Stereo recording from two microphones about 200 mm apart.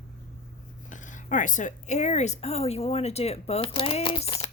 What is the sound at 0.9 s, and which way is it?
Speech, 40° left (ahead or behind).